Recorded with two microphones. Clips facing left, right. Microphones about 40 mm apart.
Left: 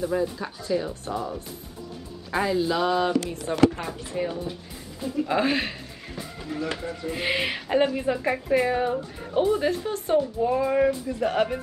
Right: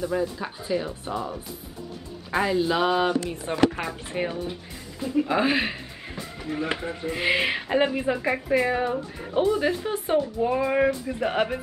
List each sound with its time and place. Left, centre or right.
0.0 s speech: centre
0.4 s a woman's voice: centre
3.5 s speech: right
5.0 s a woman's voice: right
5.3 s music: centre
6.5 s a woman's voice: right
7.1 s speech: centre
9.7 s a woman's voice: centre